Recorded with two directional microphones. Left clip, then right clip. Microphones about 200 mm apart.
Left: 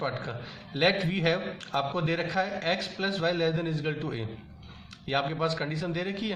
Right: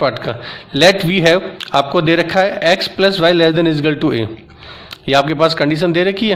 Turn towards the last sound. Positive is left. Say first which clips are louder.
# right 18 dB
turn(degrees=-50)  # may be behind; listen again after turning